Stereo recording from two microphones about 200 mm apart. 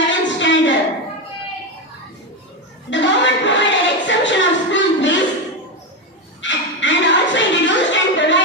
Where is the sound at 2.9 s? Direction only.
65° left (ahead or behind).